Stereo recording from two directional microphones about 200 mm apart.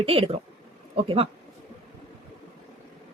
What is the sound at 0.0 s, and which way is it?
Speech, 30° right (ahead or behind).